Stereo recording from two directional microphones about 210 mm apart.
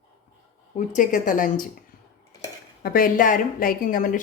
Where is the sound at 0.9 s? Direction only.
40° left (ahead or behind).